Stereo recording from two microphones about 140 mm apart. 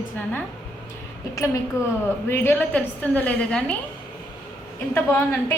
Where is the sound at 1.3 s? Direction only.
25° left (ahead or behind); by 3.7 s 5° left (ahead or behind).